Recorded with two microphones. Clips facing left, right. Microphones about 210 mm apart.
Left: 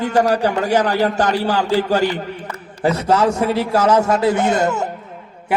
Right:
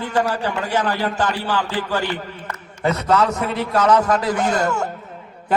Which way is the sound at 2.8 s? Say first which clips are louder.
Left 2 dB; 30° left (ahead or behind).